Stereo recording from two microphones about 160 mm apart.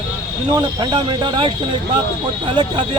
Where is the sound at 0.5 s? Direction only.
25° right (ahead or behind).